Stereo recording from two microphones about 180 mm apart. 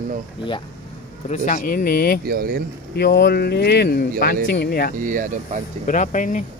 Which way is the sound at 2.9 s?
60° left (ahead or behind).